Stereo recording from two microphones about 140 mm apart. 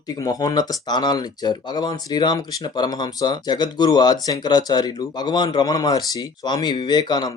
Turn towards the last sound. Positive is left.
turn(degrees=30)  # may be behind; listen again after turning